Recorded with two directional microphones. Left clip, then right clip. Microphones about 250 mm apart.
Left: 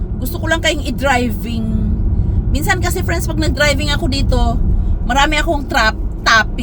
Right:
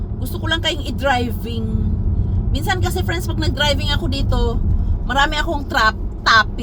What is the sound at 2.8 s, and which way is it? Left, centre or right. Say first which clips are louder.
Speech: left 3 dB; left.